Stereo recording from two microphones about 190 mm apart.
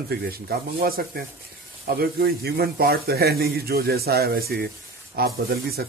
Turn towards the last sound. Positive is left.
turn(degrees=-55)  # may be behind; listen again after turning